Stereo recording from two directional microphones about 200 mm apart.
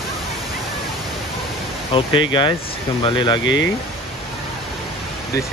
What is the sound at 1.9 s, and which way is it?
Speech, 25° left (ahead or behind).